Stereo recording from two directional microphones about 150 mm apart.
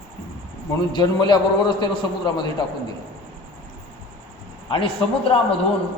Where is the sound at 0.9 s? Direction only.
30° left (ahead or behind).